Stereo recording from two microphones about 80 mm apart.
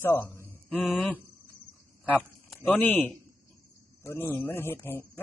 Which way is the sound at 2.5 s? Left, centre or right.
Left.